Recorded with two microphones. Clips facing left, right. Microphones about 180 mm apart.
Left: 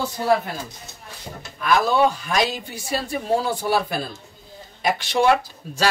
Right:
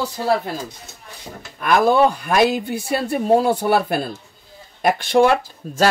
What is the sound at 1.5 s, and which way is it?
Speech, 55° right (ahead or behind).